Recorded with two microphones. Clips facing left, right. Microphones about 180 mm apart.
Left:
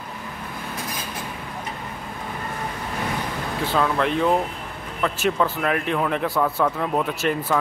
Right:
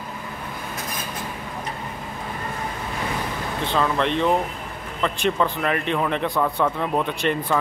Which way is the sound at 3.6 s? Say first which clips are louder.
Even; 5° left (ahead or behind).